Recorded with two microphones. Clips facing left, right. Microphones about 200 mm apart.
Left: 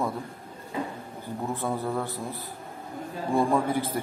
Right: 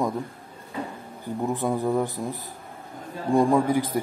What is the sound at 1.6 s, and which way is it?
A man's voice, 15° right (ahead or behind).